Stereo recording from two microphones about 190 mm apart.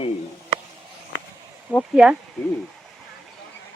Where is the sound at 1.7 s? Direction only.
10° right (ahead or behind).